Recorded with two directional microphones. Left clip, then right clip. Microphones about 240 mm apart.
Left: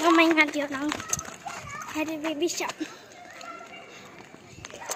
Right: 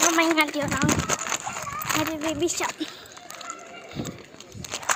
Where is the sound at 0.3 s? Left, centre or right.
Centre.